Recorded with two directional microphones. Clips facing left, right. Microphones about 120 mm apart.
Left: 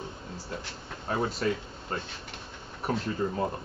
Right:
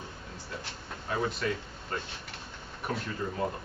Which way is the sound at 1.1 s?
30° left (ahead or behind).